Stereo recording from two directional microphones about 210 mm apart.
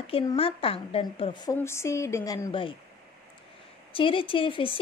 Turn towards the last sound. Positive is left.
turn(degrees=25)  # may be behind; listen again after turning